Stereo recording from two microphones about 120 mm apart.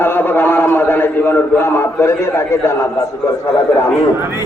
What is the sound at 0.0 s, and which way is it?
A man's voice, 15° left (ahead or behind).